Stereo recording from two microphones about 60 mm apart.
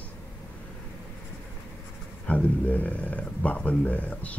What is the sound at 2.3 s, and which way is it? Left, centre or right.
Speech, left.